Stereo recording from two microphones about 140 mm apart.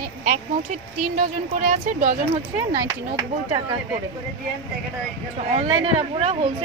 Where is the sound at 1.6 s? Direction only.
80° right.